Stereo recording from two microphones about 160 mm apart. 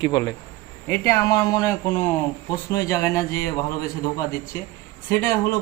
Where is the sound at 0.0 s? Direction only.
25° left (ahead or behind).